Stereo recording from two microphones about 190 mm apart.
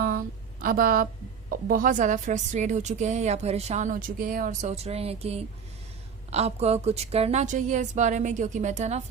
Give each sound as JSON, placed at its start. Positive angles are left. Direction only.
{"t": 0.6, "sound": "a woman's voice", "side_deg": -50}